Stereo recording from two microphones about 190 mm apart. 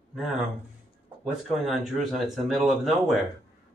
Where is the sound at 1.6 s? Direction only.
Centre (ahead or behind).